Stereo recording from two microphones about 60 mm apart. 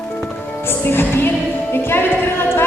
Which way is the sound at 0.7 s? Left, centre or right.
Left.